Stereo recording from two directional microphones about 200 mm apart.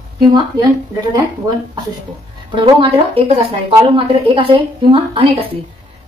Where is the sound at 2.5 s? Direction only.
25° right (ahead or behind).